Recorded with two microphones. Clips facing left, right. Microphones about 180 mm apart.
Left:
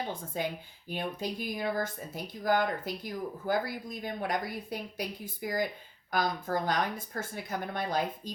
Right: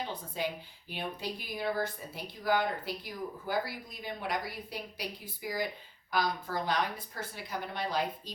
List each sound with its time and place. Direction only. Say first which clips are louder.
0.1 s speech: left 2 dB; 50° left (ahead or behind)